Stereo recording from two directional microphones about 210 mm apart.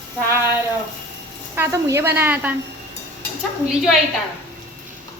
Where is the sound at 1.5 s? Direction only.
10° right (ahead or behind).